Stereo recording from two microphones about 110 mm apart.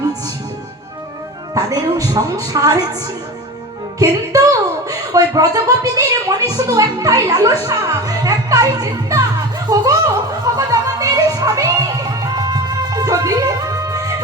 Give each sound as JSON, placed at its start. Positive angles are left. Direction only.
{"t": 1.5, "sound": "a woman's voice", "side_deg": -35}
{"t": 4.0, "sound": "speech", "side_deg": -30}
{"t": 9.6, "sound": "music", "side_deg": -35}